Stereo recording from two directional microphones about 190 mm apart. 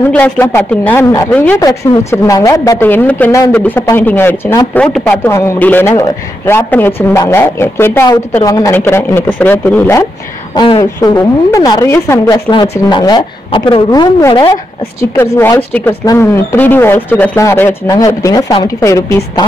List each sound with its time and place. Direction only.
0.1 s a woman's voice: 10° left (ahead or behind)
10.5 s a woman's voice: 20° left (ahead or behind)
15.3 s a woman's voice: 10° left (ahead or behind)